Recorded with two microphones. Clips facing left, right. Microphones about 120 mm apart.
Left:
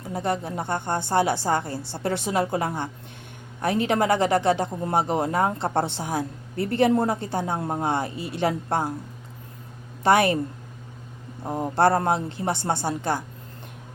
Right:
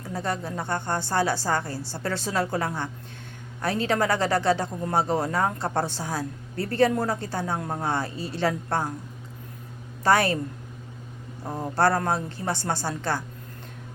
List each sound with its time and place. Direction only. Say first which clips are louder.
0.0 s a man's voice: left 3 dB; 20° left (ahead or behind)
10.0 s a man's voice: left 2 dB; 20° left (ahead or behind)
11.4 s a man's voice: left 3 dB; 20° left (ahead or behind)